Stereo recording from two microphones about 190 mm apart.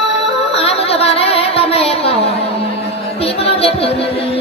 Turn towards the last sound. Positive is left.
turn(degrees=30)  # may be behind; listen again after turning